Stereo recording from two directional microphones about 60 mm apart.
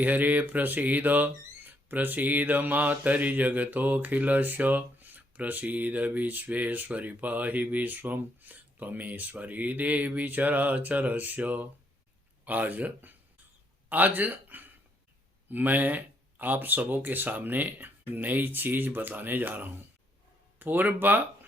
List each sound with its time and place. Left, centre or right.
0.0 s speech: right